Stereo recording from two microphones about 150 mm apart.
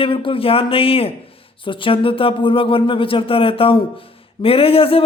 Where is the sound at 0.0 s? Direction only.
35° left (ahead or behind).